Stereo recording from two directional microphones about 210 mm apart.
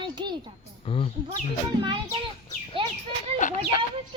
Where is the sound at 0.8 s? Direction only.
25° left (ahead or behind).